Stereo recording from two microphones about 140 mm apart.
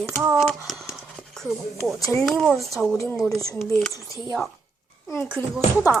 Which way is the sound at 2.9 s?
20° left (ahead or behind).